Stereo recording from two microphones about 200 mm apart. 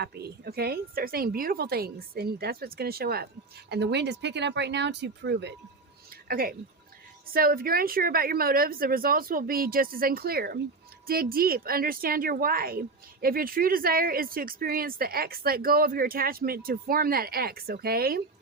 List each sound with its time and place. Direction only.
0.0 s speech: 55° right (ahead or behind)
6.2 s speech: 45° right (ahead or behind)